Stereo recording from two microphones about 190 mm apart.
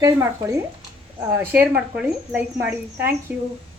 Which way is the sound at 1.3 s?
10° right (ahead or behind).